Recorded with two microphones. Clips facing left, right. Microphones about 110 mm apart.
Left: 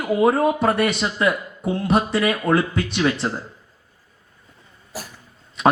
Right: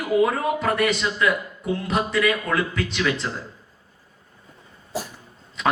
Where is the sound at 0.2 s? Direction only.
30° left (ahead or behind).